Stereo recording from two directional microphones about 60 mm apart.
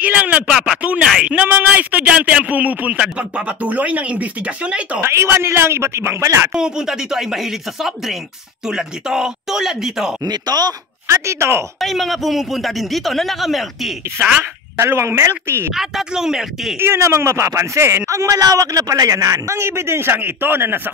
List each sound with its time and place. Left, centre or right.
0.0 s speech: right
0.5 s speech: centre
1.2 s a man's voice: right
5.0 s speech: right
6.5 s speech: centre
10.2 s speech: right
11.1 s speech: right
11.8 s a man's voice: centre
14.8 s speech: right
15.7 s a man's voice: centre
16.7 s speech: right